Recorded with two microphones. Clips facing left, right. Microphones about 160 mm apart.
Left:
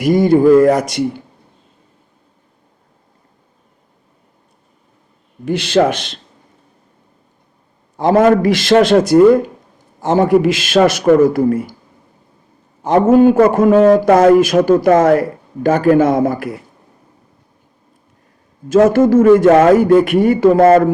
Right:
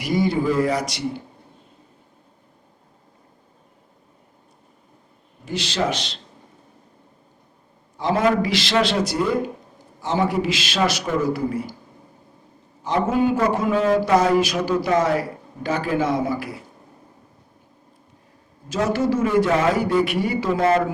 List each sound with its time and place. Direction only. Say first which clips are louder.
0.0 s a man's voice: left 11 dB; 50° left (ahead or behind)
5.5 s speech: left 10 dB; 55° left (ahead or behind)
7.9 s a man's voice: left 9 dB; 50° left (ahead or behind)
12.8 s a man's voice: left 11 dB; 50° left (ahead or behind)
18.7 s a man's voice: left 12 dB; 50° left (ahead or behind)